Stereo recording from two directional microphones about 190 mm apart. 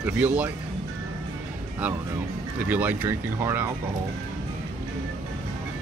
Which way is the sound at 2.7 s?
10° right (ahead or behind).